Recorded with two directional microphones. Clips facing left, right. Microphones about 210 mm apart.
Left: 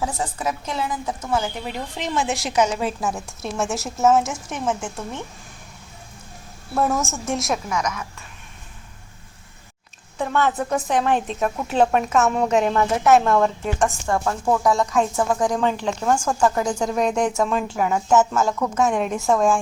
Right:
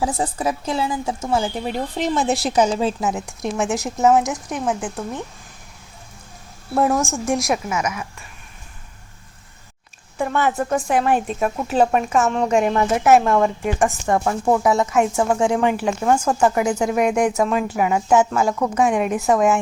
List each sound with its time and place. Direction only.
0.0 s a woman's voice: 35° right (ahead or behind); by 4.5 s 15° right (ahead or behind)
4.5 s speech: centre (ahead or behind)
6.9 s speech: centre (ahead or behind)
10.2 s speech: 10° right (ahead or behind)
12.3 s speech: 5° left (ahead or behind)
12.5 s a woman's voice: 10° right (ahead or behind)
15.7 s a woman's voice: 10° right (ahead or behind)
16.1 s a woman's voice: 20° right (ahead or behind)
16.8 s a woman's voice: 10° right (ahead or behind)